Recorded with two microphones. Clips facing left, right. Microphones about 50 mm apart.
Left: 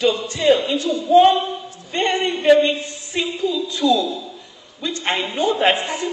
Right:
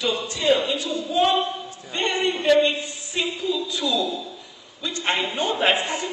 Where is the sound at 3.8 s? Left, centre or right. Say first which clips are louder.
Left 9 dB; centre.